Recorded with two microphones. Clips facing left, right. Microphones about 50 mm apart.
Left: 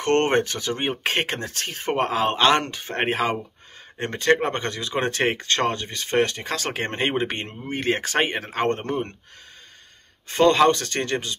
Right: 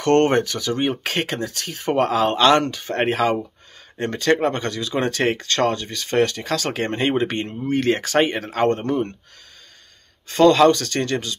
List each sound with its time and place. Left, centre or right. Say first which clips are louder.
0.0 s speech: right 3 dB; left
10.2 s speech: right 3 dB; left